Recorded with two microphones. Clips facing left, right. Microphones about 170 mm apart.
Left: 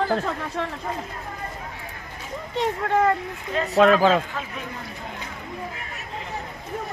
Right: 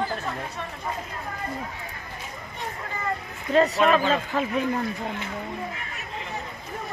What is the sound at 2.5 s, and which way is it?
Speech, 85° left.